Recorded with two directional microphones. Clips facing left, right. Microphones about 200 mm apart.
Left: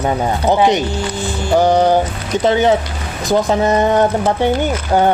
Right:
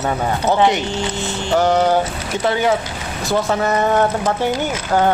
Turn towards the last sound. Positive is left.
turn(degrees=15)  # may be behind; listen again after turning